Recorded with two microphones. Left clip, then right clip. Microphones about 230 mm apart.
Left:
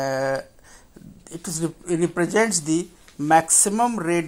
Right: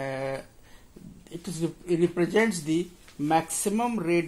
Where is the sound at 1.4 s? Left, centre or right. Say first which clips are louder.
Left 4 dB; left.